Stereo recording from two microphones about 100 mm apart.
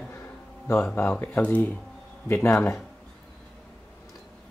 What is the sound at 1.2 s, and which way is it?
Speech, 15° left (ahead or behind).